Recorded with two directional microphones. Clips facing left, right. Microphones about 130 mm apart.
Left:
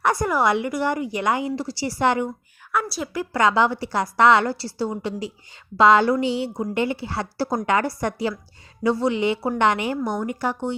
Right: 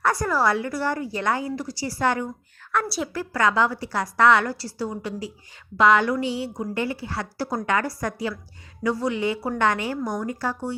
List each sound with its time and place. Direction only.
0.0 s a woman's voice: 20° left (ahead or behind)
1.5 s a woman's voice: 30° left (ahead or behind)
2.7 s a woman's voice: centre (ahead or behind)
3.1 s a woman's voice: 20° left (ahead or behind)